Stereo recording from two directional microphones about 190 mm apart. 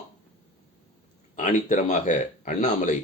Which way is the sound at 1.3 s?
40° left (ahead or behind).